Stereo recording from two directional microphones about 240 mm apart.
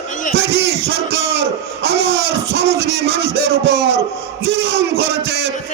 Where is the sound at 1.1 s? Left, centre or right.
Right.